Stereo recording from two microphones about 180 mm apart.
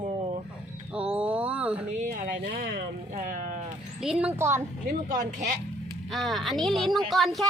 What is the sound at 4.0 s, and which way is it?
Speech, 5° right (ahead or behind).